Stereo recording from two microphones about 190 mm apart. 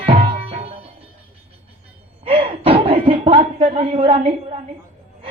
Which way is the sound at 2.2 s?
30° right (ahead or behind).